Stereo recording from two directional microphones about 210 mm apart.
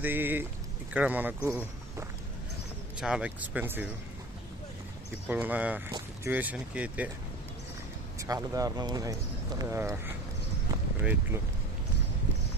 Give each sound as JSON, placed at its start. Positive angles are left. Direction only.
{"t": 0.0, "sound": "speech", "side_deg": -10}
{"t": 5.3, "sound": "speech", "side_deg": -10}
{"t": 8.2, "sound": "speech", "side_deg": -15}